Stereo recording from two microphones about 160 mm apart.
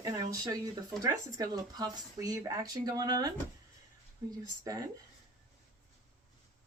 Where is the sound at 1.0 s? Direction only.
25° right (ahead or behind).